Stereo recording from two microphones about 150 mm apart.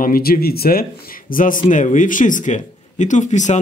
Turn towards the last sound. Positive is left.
turn(degrees=55)  # may be behind; listen again after turning